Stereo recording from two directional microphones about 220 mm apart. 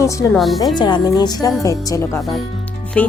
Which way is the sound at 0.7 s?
20° left (ahead or behind).